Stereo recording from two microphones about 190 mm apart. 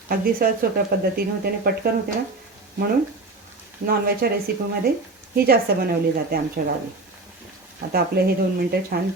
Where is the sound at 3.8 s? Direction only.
50° right (ahead or behind).